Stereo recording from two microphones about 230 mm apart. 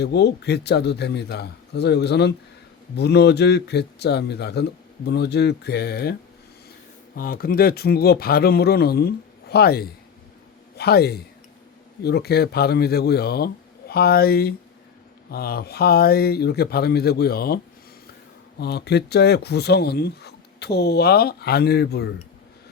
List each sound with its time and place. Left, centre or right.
0.0 s speech: left
7.2 s a man's voice: left
18.6 s speech: left